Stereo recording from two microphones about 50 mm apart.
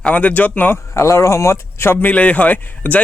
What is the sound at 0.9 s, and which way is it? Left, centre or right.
Speech, left.